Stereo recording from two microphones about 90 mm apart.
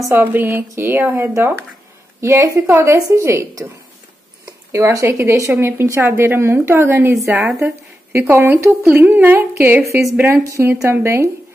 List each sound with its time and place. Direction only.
0.1 s a woman's voice: 20° right (ahead or behind); by 3.6 s 35° right (ahead or behind)
4.7 s a woman's voice: 30° right (ahead or behind)
9.8 s a woman's voice: 35° right (ahead or behind)
10.1 s a woman's voice: 25° right (ahead or behind)
10.4 s a woman's voice: 35° right (ahead or behind)